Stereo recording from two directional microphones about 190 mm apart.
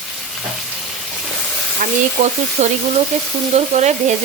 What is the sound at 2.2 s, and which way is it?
Speech, 45° right (ahead or behind).